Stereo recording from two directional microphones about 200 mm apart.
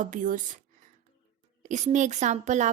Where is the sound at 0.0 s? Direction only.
40° right (ahead or behind).